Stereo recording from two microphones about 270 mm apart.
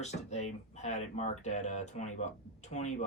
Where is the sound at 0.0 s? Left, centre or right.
Left.